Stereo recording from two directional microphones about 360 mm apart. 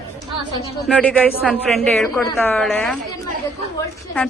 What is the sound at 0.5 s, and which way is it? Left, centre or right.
A woman's voice, centre.